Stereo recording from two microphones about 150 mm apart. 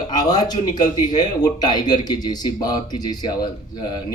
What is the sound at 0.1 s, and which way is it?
A man's voice, 25° left (ahead or behind).